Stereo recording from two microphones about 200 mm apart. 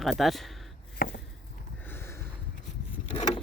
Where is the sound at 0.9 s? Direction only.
50° left (ahead or behind).